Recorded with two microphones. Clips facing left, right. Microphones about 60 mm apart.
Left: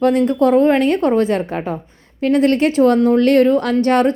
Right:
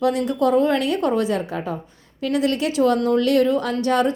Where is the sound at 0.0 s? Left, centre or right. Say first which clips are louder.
Left 5 dB; left.